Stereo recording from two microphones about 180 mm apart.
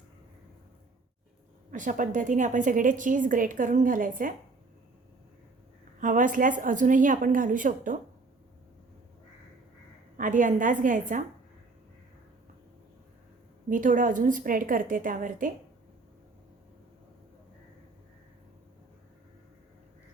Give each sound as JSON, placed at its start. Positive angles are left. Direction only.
{"t": 1.7, "sound": "a woman's voice", "side_deg": -45}
{"t": 6.0, "sound": "a woman's voice", "side_deg": -45}
{"t": 10.2, "sound": "a woman's voice", "side_deg": -45}
{"t": 13.7, "sound": "a woman's voice", "side_deg": -45}